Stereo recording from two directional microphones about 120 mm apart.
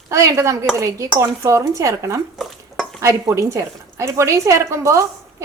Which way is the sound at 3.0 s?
25° right (ahead or behind).